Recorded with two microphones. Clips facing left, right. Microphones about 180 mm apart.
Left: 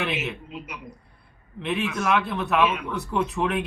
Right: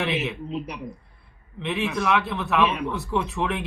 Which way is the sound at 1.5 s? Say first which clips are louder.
Right 1 dB; centre (ahead or behind).